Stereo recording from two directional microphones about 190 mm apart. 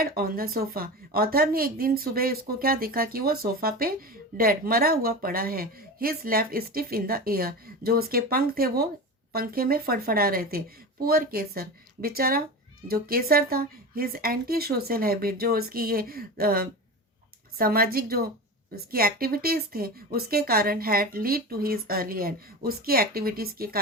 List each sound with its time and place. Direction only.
0.0 s a woman's voice: 50° right (ahead or behind)